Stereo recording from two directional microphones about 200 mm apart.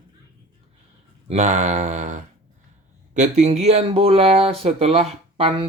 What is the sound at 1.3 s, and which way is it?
Speech, 35° right (ahead or behind).